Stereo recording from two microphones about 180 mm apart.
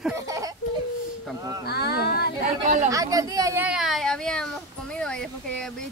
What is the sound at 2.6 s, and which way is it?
Speech, 40° right (ahead or behind).